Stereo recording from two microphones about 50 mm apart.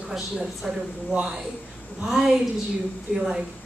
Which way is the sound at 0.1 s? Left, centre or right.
Centre.